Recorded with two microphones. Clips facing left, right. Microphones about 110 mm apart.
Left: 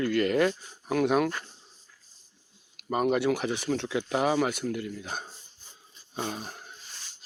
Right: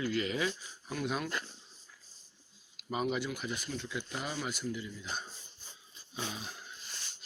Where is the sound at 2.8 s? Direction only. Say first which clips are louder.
Left 8 dB; 55° left (ahead or behind).